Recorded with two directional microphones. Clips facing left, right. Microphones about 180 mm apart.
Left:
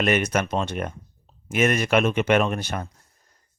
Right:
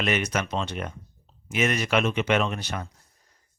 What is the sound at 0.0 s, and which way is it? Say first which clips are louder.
Speech: left 4 dB; 50° left (ahead or behind).